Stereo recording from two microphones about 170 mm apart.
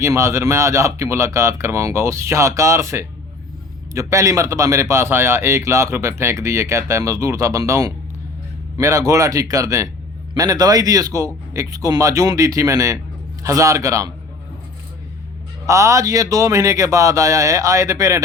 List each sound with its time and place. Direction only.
0.0 s a man's voice: 15° right (ahead or behind)
15.6 s speech: 20° right (ahead or behind)